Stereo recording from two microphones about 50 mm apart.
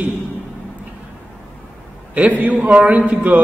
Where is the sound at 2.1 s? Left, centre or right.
Right.